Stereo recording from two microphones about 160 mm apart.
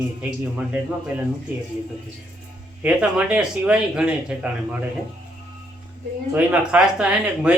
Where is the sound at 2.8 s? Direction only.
5° right (ahead or behind).